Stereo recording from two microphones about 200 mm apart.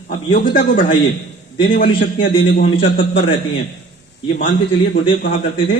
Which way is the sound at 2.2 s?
65° left (ahead or behind).